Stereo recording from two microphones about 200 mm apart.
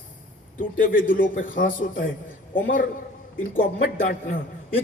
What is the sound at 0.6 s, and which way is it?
A man's voice, 45° left (ahead or behind).